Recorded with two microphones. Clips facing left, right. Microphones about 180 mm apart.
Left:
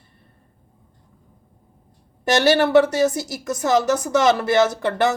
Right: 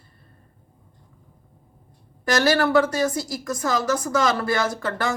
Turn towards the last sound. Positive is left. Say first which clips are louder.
# left 7 dB
turn(degrees=25)  # may be behind; listen again after turning